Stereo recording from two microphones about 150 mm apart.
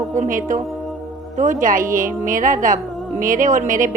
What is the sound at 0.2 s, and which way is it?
A woman's voice, 60° right (ahead or behind).